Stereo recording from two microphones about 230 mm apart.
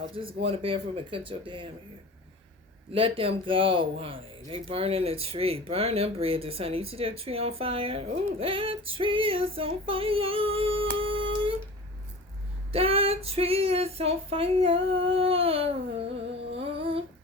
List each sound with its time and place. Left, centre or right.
0.4 s speech: right
2.9 s speech: right
11.0 s music: right
12.7 s speech: right
16.6 s humming: right